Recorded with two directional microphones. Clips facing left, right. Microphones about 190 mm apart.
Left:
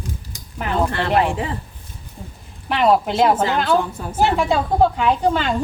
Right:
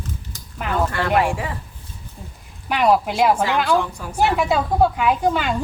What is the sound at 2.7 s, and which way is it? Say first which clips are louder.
Speech: left 1 dB; centre (ahead or behind).